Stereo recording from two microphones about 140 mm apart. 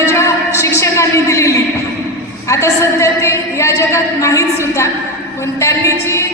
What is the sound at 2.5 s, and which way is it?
A woman's voice, 20° left (ahead or behind).